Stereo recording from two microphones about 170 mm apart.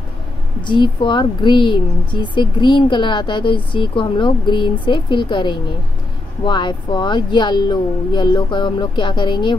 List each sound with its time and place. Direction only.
0.6 s speech: 30° left (ahead or behind)